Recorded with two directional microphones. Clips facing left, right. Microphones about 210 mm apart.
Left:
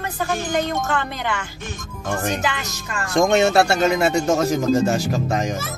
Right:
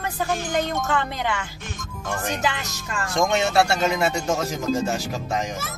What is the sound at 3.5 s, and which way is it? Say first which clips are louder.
Speech: left 3 dB; 50° left (ahead or behind).